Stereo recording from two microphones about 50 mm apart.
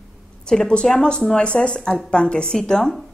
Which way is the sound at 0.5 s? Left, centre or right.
Centre.